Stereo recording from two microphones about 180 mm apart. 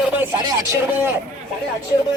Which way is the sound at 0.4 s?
20° right (ahead or behind).